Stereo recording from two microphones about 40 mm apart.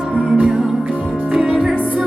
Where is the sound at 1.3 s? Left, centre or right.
Centre.